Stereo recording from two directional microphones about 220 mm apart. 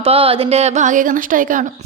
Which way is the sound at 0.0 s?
25° right (ahead or behind).